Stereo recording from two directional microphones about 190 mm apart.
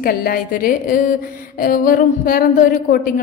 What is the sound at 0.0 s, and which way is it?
A woman's voice, 50° left (ahead or behind).